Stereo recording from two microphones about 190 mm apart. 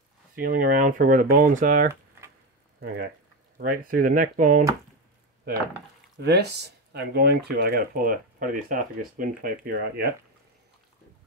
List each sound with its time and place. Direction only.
0.4 s speech: 50° right (ahead or behind)
3.5 s speech: 50° right (ahead or behind)
6.2 s speech: 60° right (ahead or behind)